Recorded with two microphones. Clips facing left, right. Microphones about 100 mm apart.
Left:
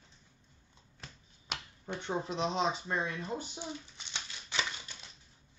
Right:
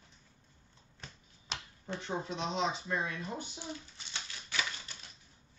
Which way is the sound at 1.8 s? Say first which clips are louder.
Left 2 dB; 30° left (ahead or behind).